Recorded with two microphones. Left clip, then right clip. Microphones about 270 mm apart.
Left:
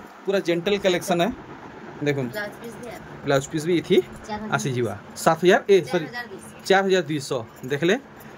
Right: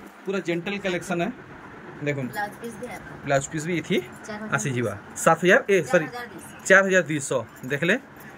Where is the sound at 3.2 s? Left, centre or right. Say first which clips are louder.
Left 2 dB; centre.